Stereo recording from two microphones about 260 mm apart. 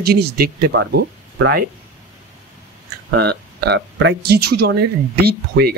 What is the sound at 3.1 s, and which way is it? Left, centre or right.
Speech, right.